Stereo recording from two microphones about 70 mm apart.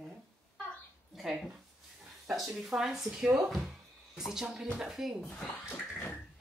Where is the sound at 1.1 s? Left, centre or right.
Centre.